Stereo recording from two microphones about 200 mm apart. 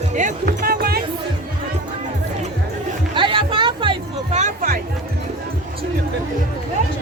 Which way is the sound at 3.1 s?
25° right (ahead or behind).